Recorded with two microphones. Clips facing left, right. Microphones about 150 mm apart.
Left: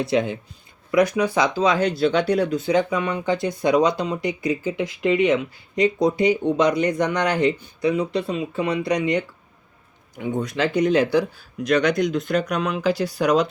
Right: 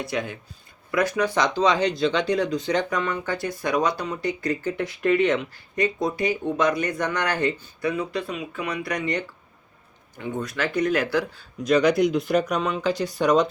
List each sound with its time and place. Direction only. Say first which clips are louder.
0.0 s speech: left 7 dB; 25° left (ahead or behind)
11.6 s speech: right 1 dB; 5° right (ahead or behind)